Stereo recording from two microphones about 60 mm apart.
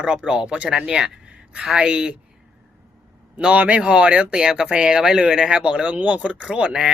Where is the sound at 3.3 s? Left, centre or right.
Centre.